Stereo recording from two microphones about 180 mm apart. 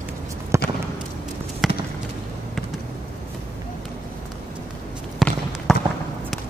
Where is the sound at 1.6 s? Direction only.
Centre (ahead or behind).